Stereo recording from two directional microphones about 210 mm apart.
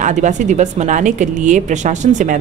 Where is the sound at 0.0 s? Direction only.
35° right (ahead or behind).